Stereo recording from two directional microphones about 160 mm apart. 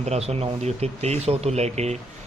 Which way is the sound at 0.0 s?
40° right (ahead or behind).